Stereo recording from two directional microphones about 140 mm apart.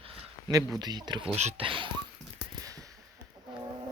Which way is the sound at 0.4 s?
30° right (ahead or behind).